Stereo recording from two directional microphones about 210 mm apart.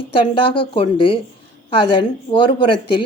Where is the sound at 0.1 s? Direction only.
25° left (ahead or behind).